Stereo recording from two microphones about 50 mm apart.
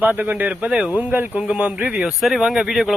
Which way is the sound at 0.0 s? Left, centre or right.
Right.